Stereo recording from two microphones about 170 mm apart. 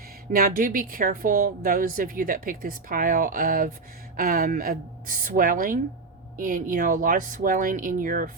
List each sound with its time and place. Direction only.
0.3 s a woman's voice: 55° right (ahead or behind)